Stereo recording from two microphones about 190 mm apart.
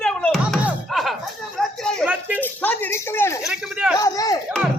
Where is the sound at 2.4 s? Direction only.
10° left (ahead or behind).